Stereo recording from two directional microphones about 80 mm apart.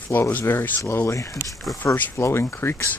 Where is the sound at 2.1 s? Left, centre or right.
Left.